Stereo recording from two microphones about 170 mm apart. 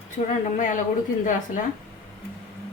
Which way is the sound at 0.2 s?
45° left (ahead or behind).